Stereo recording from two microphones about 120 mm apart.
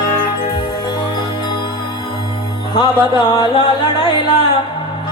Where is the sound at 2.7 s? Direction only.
35° left (ahead or behind).